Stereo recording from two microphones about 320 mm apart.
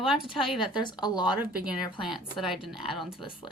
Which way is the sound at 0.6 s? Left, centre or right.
Centre.